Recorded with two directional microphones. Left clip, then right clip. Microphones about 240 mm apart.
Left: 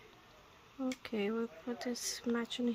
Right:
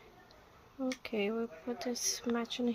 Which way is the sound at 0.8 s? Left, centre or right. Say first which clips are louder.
Right 2 dB; left.